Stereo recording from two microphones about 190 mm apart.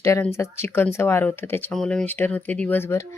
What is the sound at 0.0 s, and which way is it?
A woman's voice, 15° left (ahead or behind).